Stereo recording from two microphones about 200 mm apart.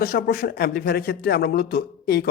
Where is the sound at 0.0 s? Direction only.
50° left (ahead or behind).